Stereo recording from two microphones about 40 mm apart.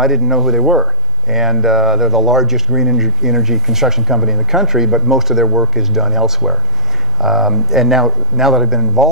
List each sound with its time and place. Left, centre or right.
0.0 s speech: centre